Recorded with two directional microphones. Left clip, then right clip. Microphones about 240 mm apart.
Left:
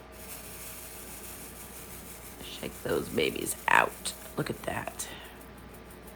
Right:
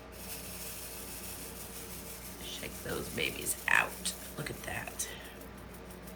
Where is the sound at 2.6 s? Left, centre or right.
Centre.